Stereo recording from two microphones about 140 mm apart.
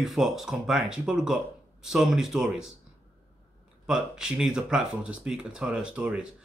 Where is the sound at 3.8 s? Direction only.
5° right (ahead or behind).